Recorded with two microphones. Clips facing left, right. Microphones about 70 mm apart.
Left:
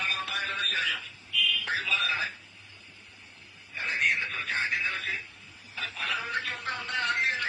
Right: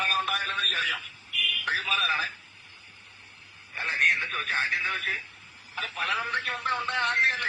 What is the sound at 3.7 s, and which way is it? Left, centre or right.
Radio, right.